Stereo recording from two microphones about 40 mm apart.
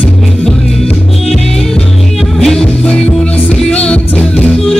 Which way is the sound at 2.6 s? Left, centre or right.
Left.